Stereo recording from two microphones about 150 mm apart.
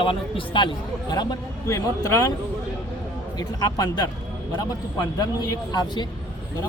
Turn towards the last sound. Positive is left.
turn(degrees=30)  # may be behind; listen again after turning